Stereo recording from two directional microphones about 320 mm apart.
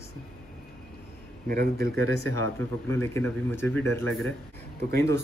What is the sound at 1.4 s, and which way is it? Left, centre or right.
Speech, right.